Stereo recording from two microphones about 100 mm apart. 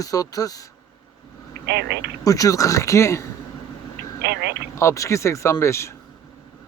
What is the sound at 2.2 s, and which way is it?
Speech, 35° left (ahead or behind).